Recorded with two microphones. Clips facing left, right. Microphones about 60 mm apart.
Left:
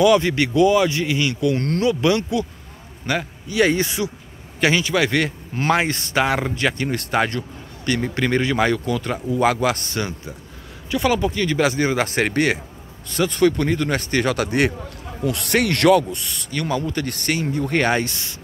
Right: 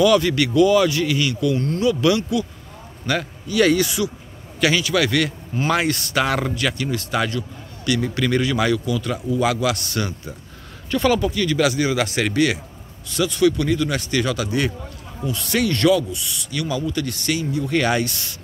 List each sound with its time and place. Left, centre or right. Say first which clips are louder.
0.0 s speech: even; left
3.7 s speech: right 2 dB; left